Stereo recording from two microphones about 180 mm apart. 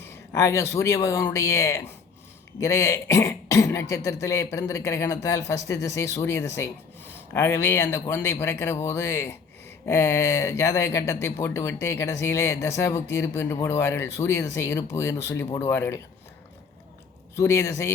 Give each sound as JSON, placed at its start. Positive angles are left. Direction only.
{"t": 0.0, "sound": "speech", "side_deg": 15}
{"t": 17.3, "sound": "speech", "side_deg": 15}